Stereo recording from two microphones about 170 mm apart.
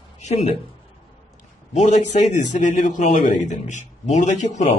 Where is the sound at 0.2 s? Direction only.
40° left (ahead or behind).